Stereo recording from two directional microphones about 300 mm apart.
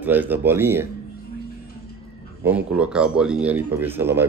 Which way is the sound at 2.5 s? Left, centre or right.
Centre.